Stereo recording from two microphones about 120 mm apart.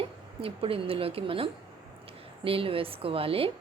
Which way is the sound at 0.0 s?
50° right (ahead or behind).